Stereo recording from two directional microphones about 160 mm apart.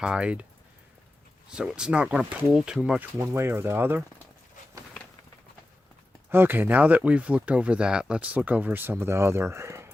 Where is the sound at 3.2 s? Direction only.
15° right (ahead or behind).